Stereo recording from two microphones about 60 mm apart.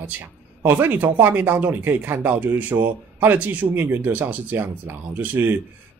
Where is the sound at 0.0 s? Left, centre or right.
Right.